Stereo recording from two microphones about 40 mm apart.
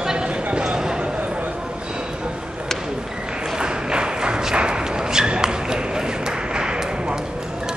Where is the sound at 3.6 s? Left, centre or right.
Right.